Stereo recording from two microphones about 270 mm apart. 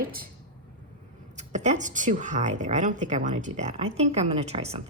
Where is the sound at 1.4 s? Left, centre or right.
Right.